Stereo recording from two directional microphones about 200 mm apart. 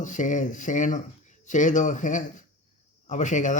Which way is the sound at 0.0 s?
40° left (ahead or behind).